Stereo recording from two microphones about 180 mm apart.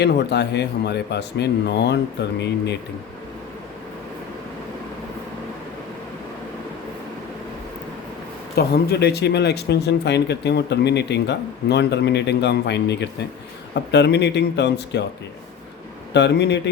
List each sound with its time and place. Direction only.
0.0 s speech: 70° left (ahead or behind)
8.5 s speech: 65° left (ahead or behind)
16.1 s speech: 75° left (ahead or behind)